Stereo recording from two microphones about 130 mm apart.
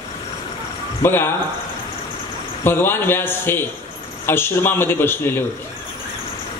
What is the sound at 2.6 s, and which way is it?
A man's voice, 15° left (ahead or behind).